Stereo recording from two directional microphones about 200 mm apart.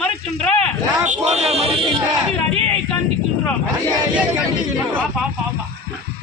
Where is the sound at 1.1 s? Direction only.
30° right (ahead or behind).